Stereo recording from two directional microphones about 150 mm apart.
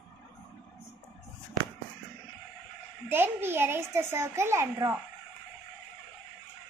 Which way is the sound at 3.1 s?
15° right (ahead or behind).